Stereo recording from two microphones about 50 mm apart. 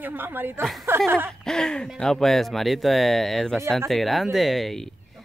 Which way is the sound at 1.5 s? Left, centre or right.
Centre.